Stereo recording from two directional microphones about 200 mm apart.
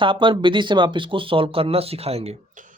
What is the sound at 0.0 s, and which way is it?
Speech, 25° right (ahead or behind).